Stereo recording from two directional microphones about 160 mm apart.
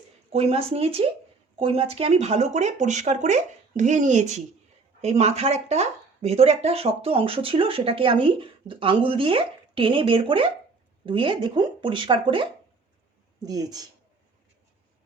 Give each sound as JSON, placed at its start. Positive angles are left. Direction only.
{"t": 0.3, "sound": "speech", "side_deg": -40}